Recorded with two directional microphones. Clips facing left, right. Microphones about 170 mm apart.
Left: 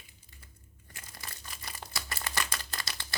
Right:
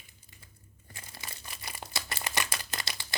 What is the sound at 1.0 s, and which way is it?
Crumpling, 20° right (ahead or behind).